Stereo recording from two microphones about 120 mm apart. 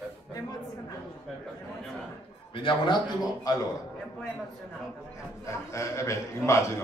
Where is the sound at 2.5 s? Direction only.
40° left (ahead or behind).